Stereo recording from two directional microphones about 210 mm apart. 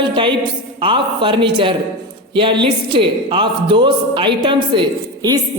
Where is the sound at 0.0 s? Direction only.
25° right (ahead or behind).